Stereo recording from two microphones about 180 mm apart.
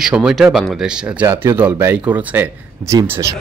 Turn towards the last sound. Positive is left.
turn(degrees=-15)  # may be behind; listen again after turning